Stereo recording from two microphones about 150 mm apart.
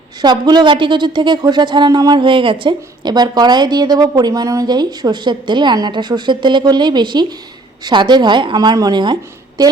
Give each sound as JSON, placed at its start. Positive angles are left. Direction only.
{"t": 0.2, "sound": "a woman's voice", "side_deg": -30}